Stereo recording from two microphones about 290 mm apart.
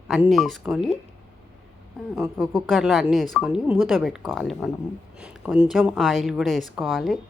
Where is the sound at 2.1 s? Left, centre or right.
Centre.